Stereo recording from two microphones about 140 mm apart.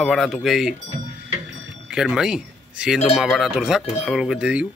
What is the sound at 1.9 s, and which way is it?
Speech, 5° right (ahead or behind).